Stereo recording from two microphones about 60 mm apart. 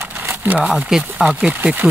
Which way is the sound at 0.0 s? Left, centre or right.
Right.